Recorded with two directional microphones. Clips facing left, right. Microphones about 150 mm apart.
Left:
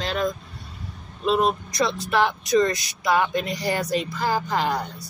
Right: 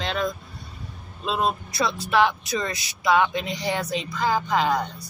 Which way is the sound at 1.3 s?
Centre (ahead or behind).